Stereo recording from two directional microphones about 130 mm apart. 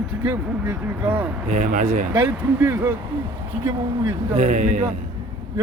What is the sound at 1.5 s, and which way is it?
Speech, 70° right (ahead or behind).